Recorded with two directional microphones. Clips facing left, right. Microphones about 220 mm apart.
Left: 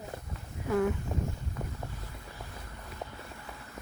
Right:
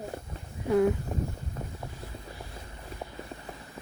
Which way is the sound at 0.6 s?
20° right (ahead or behind).